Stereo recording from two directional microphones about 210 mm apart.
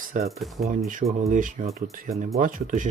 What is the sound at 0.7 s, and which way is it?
Speech, 40° right (ahead or behind).